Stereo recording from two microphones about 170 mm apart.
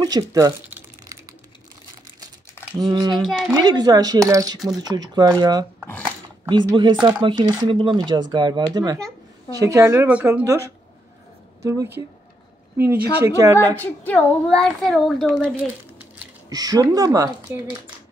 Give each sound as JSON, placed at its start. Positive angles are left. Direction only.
{"t": 0.0, "sound": "crumpling", "side_deg": -20}
{"t": 2.8, "sound": "speech", "side_deg": -25}
{"t": 3.2, "sound": "a child's voice", "side_deg": 0}
{"t": 3.5, "sound": "speech", "side_deg": -25}
{"t": 11.6, "sound": "speech", "side_deg": -20}
{"t": 13.7, "sound": "a child's voice", "side_deg": 10}
{"t": 16.4, "sound": "speech", "side_deg": -20}